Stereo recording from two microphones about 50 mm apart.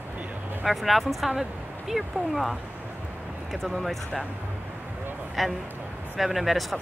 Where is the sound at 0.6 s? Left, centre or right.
Centre.